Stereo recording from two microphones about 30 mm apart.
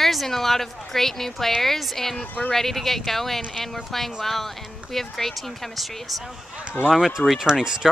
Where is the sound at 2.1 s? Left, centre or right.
Left.